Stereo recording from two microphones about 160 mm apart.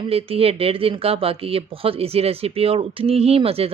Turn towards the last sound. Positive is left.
turn(degrees=-35)  # may be behind; listen again after turning